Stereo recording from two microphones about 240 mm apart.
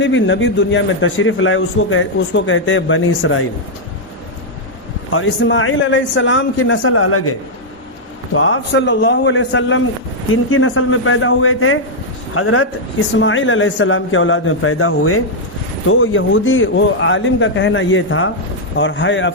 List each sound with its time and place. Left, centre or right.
0.0 s a man's voice: left
5.1 s a man's voice: left